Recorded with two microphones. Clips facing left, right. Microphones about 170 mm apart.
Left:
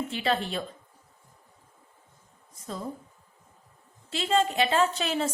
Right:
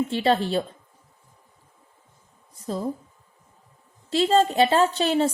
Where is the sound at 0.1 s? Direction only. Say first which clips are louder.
Right 7 dB; 30° right (ahead or behind).